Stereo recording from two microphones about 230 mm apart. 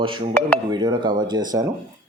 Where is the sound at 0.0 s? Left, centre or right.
Right.